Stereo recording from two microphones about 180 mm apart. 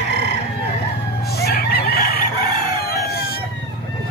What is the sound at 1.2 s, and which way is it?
Chicken, 65° left (ahead or behind).